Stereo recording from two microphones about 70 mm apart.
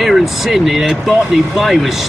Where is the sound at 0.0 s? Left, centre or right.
Centre.